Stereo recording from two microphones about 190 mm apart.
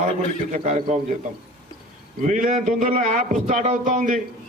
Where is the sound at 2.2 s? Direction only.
45° right (ahead or behind).